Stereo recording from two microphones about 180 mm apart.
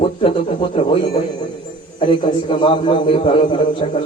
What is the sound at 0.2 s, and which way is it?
A man's voice, 30° left (ahead or behind).